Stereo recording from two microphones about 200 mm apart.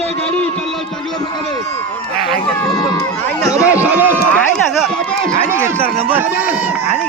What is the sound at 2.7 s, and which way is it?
Speech, 20° left (ahead or behind).